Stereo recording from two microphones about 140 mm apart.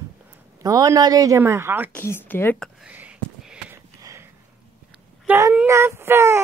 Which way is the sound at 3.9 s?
20° right (ahead or behind).